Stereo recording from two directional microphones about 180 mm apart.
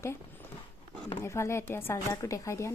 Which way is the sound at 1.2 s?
15° left (ahead or behind).